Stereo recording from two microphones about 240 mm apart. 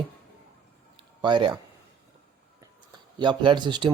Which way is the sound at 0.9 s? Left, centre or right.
Centre.